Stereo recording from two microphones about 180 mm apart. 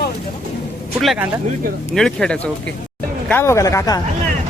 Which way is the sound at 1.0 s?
5° right (ahead or behind).